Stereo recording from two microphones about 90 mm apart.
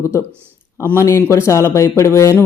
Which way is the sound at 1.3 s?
30° left (ahead or behind).